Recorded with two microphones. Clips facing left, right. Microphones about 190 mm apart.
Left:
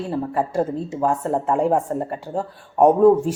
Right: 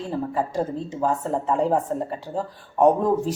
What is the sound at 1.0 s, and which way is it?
Speech, 10° left (ahead or behind).